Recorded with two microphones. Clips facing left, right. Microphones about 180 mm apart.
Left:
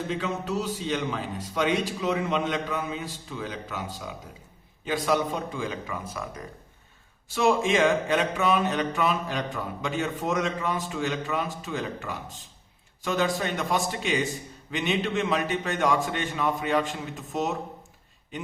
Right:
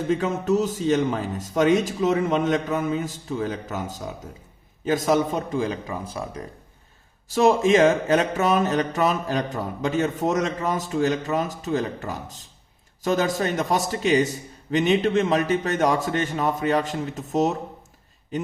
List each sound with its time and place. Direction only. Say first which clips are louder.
0.1 s speech: right 10 dB; 45° right (ahead or behind)
4.9 s mantra: right 5 dB; 45° right (ahead or behind)